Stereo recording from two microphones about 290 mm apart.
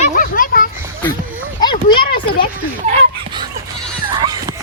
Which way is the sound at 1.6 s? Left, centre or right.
Centre.